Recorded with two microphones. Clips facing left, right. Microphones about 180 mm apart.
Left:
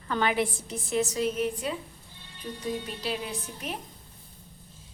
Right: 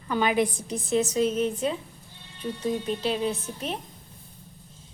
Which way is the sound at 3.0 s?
25° right (ahead or behind).